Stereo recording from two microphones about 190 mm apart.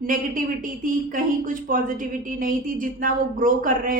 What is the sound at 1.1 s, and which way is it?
A woman's voice, 45° right (ahead or behind).